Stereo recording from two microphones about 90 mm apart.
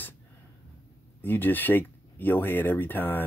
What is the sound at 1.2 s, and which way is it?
Speech, 25° left (ahead or behind).